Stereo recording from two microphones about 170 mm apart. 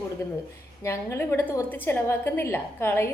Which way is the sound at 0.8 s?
15° left (ahead or behind).